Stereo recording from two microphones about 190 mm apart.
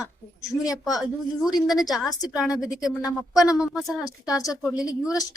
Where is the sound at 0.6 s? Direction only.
20° left (ahead or behind).